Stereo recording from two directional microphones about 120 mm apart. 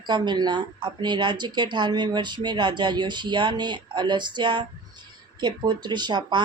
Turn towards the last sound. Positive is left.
turn(degrees=-40)  # may be behind; listen again after turning